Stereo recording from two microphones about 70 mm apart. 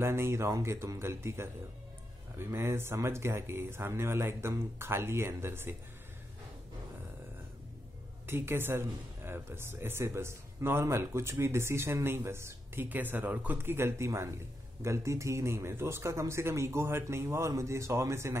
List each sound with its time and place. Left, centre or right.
0.0 s speech: right
8.3 s speech: right
12.8 s speech: right